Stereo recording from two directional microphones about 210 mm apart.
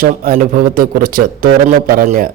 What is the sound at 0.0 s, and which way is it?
A man's voice, 45° right (ahead or behind).